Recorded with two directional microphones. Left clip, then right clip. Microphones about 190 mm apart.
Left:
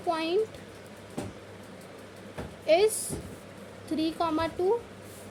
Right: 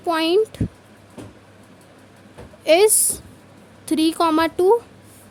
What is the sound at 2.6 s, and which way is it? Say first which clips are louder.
Speech: right 8 dB; 40° right (ahead or behind).